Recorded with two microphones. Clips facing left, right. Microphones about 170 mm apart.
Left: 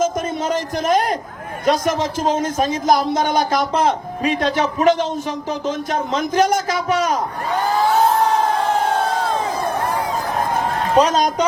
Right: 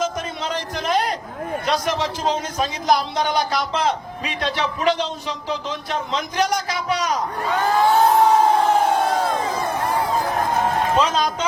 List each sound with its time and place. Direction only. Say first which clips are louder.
0.0 s a sound: left 5 dB; 45° left (ahead or behind)
1.6 s a man's voice: left 6 dB; 45° left (ahead or behind)
10.9 s speech: left 5 dB; 40° left (ahead or behind)